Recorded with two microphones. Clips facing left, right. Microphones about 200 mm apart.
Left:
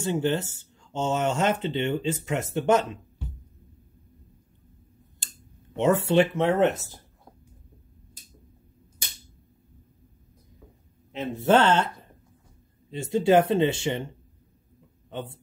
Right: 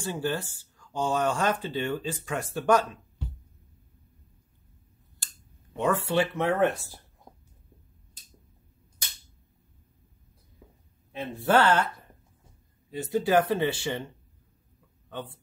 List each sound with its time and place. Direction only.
0.0 s speech: 20° left (ahead or behind)
5.2 s a sound: 20° left (ahead or behind)
5.8 s speech: 25° left (ahead or behind)
11.1 s speech: 20° left (ahead or behind)
12.9 s speech: 25° left (ahead or behind)
15.0 s a man's voice: 20° left (ahead or behind)